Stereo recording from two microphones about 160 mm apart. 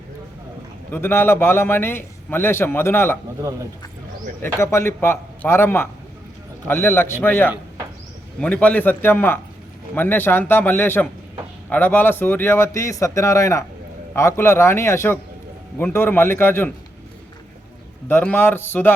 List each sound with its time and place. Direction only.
0.9 s a man's voice: 10° left (ahead or behind)
4.4 s a man's voice: 15° left (ahead or behind)
18.1 s a man's voice: 10° left (ahead or behind)